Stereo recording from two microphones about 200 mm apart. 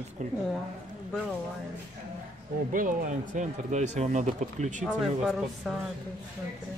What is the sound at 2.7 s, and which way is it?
Speech, 40° right (ahead or behind).